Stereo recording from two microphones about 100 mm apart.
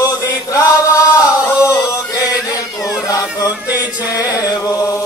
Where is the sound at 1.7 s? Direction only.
40° left (ahead or behind).